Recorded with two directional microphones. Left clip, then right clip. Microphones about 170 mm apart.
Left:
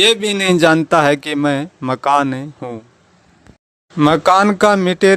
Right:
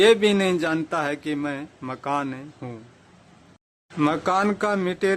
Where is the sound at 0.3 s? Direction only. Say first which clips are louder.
Left 9 dB; 40° left (ahead or behind).